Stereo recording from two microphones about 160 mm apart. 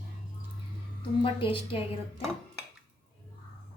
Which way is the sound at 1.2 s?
35° left (ahead or behind).